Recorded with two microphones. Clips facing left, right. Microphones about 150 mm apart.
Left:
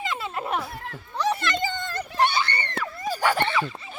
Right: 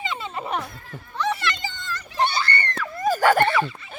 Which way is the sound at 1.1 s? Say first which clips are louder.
Left 1 dB; 40° left (ahead or behind).